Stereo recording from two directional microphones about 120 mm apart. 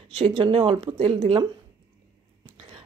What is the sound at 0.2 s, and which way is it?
A woman's voice, 50° right (ahead or behind).